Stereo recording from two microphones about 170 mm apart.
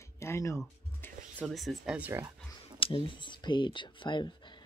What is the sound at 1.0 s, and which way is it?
Music, 10° left (ahead or behind).